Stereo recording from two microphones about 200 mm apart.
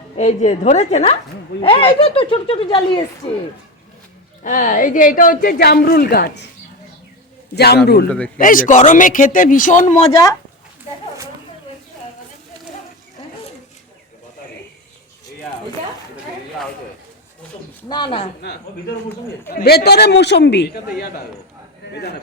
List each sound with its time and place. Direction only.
0.2 s speech: 35° left (ahead or behind)
4.4 s a woman's voice: 40° left (ahead or behind)
7.5 s a woman's voice: 55° left (ahead or behind)
8.4 s speech: 40° left (ahead or behind)
17.8 s speech: 20° left (ahead or behind)
19.5 s a man's voice: 55° left (ahead or behind)